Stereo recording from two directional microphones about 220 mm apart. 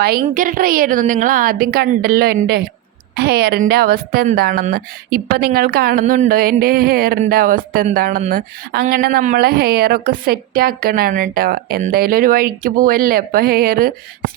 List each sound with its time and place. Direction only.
0.0 s a woman's voice: 40° right (ahead or behind)